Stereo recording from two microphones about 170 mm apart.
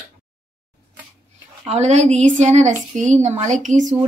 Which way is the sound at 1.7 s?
40° right (ahead or behind).